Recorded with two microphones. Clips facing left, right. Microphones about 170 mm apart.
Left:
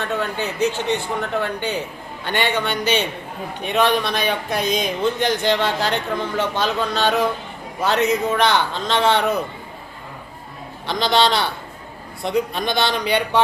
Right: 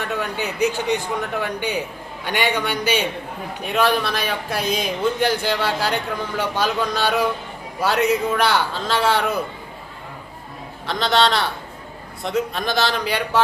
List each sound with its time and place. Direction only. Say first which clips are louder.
0.2 s speech: right 1 dB; 15° right (ahead or behind)
10.8 s a man's voice: left 1 dB; centre (ahead or behind)